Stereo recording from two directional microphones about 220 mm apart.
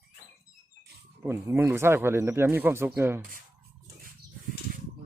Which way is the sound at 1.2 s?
10° right (ahead or behind).